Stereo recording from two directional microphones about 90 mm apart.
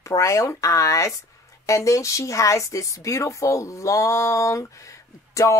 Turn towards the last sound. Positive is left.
turn(degrees=35)  # may be behind; listen again after turning